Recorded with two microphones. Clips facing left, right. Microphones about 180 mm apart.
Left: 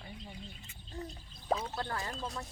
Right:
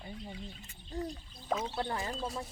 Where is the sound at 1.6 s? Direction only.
20° right (ahead or behind).